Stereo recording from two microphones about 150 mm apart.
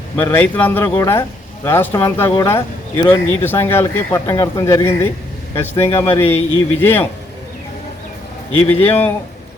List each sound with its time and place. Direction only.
0.2 s speech: 10° left (ahead or behind)
8.6 s speech: 15° left (ahead or behind)